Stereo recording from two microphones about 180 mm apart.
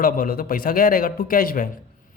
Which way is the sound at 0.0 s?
55° left (ahead or behind).